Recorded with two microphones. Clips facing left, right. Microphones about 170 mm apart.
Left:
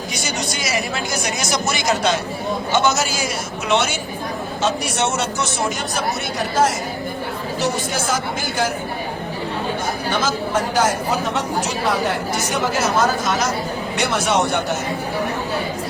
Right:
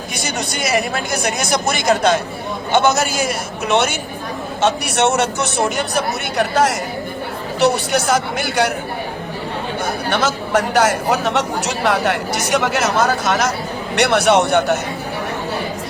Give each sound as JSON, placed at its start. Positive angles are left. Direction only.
{"t": 0.3, "sound": "speech", "side_deg": -55}
{"t": 4.6, "sound": "speech", "side_deg": -65}
{"t": 10.1, "sound": "speech", "side_deg": -70}